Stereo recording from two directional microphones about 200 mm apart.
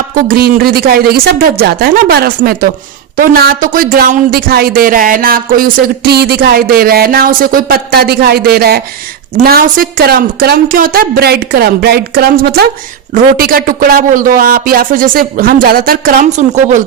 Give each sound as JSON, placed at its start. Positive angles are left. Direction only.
{"t": 0.1, "sound": "speech", "side_deg": -45}